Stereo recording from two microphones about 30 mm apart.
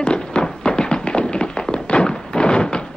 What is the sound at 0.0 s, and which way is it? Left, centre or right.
Music, left.